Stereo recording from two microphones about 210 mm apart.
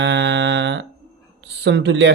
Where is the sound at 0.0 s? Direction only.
55° right (ahead or behind).